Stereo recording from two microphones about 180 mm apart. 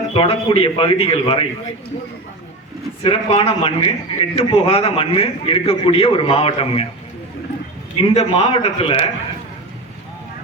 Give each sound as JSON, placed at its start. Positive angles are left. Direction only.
{"t": 0.1, "sound": "a man's voice", "side_deg": 30}
{"t": 3.0, "sound": "a man's voice", "side_deg": 30}
{"t": 7.9, "sound": "a man's voice", "side_deg": 35}